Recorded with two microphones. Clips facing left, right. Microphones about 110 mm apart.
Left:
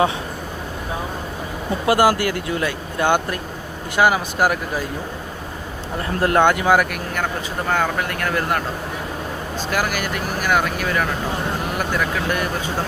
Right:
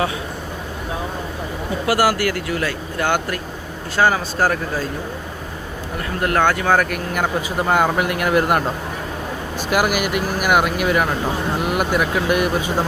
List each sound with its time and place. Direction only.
1.9 s speech: 20° left (ahead or behind)
6.1 s speech: 25° left (ahead or behind)
7.7 s speech: 10° right (ahead or behind)